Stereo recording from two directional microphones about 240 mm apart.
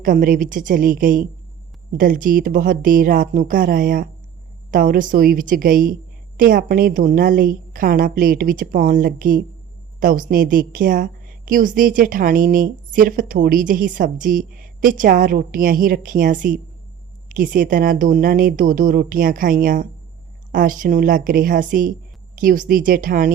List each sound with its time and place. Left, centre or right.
0.0 s a woman's voice: right